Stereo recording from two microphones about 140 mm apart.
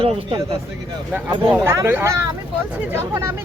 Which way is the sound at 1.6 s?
20° right (ahead or behind).